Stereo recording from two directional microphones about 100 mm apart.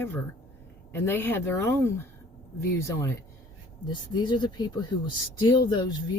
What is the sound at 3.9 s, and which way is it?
Speech, 50° left (ahead or behind).